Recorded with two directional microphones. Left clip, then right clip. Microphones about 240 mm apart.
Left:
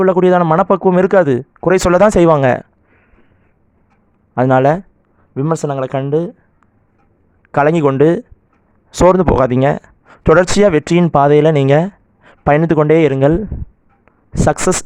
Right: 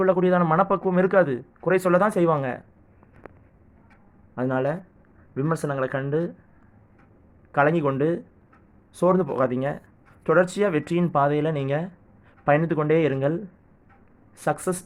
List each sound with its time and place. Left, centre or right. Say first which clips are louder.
0.0 s speech: left 9 dB; left
4.4 s speech: left 14 dB; left
7.5 s speech: left 9 dB; left